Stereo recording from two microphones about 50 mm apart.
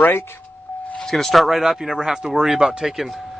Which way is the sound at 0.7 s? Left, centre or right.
Left.